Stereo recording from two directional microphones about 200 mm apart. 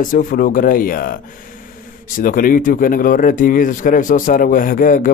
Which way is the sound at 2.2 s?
45° left (ahead or behind).